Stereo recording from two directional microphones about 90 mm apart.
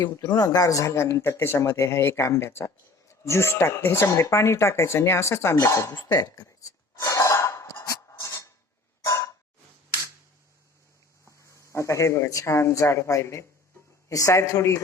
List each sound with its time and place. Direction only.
0.2 s speech: 45° left (ahead or behind)
5.9 s a sound: 50° left (ahead or behind)
11.7 s speech: 35° left (ahead or behind)